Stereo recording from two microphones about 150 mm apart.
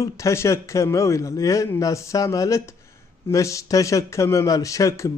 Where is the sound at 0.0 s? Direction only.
20° left (ahead or behind).